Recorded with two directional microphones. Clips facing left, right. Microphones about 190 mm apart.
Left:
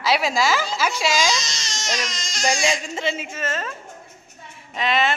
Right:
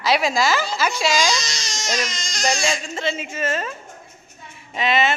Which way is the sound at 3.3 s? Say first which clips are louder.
Right 3 dB; 10° right (ahead or behind).